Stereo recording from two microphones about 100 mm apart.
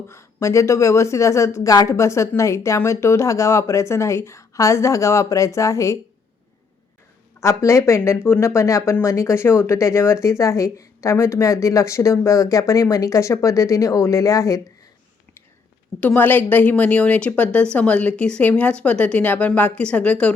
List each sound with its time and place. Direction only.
0.1 s speech: 30° left (ahead or behind)
7.3 s speech: 30° left (ahead or behind)
16.0 s a woman's voice: 20° left (ahead or behind)